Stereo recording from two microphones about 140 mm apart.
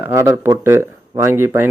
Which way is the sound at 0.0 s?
20° right (ahead or behind).